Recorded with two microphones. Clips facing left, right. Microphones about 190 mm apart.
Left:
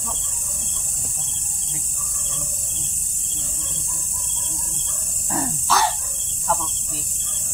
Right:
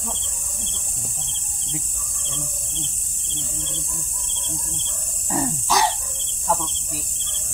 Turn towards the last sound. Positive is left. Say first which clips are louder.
# right 1 dB
turn(degrees=-15)  # may be behind; listen again after turning